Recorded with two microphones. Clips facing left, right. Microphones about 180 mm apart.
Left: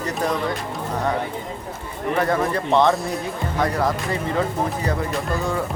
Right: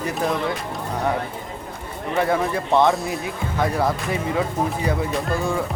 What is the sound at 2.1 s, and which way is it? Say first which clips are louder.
A man's voice: right 1 dB; 5° right (ahead or behind).